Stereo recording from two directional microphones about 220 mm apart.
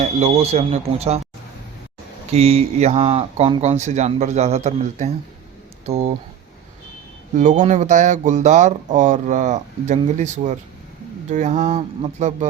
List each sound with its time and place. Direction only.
0.0 s speech: 30° right (ahead or behind)
2.3 s speech: 30° right (ahead or behind)
7.3 s speech: 35° right (ahead or behind)